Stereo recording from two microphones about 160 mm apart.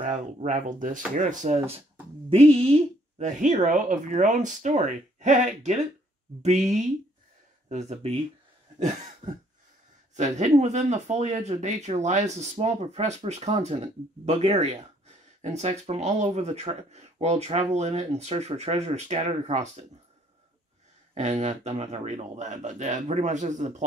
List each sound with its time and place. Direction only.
0.0 s a woman's voice: 50° right (ahead or behind)
8.7 s a sound: 45° right (ahead or behind)
10.1 s a woman's voice: 45° right (ahead or behind)
21.1 s a woman's voice: 45° right (ahead or behind)